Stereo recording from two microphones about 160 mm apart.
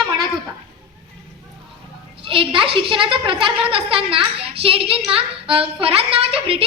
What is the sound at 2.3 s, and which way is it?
A child's voice, 35° right (ahead or behind).